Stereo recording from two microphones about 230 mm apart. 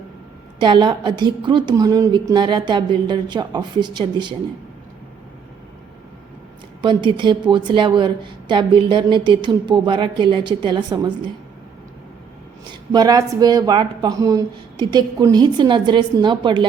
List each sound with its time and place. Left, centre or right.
0.6 s a woman's voice: centre
6.8 s a woman's voice: right
12.9 s a woman's voice: centre